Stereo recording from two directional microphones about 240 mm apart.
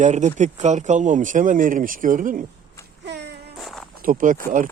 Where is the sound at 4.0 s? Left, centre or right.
Right.